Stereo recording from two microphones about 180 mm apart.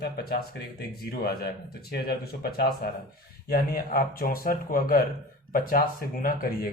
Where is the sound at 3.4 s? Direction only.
55° left (ahead or behind).